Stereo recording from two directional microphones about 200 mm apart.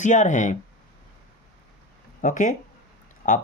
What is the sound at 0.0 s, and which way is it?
Speech, 35° left (ahead or behind).